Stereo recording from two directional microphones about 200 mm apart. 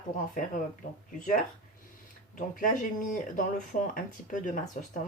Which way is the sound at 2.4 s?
40° left (ahead or behind).